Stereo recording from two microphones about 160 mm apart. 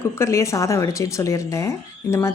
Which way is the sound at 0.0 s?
15° left (ahead or behind).